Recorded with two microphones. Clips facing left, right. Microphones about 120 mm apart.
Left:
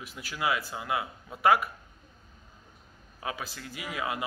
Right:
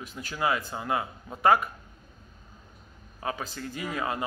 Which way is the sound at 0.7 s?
35° right (ahead or behind).